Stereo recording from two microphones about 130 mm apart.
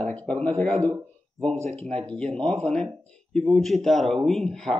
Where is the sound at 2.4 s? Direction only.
5° left (ahead or behind).